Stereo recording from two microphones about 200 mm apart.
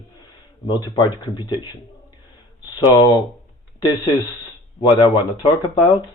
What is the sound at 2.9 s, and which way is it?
Speech, 20° left (ahead or behind).